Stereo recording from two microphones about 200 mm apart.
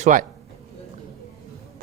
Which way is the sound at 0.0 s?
40° right (ahead or behind).